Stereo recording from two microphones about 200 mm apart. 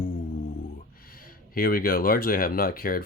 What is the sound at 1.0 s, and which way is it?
Speech, 45° left (ahead or behind).